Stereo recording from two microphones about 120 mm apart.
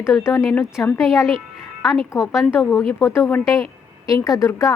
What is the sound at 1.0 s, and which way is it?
A woman's voice, centre (ahead or behind).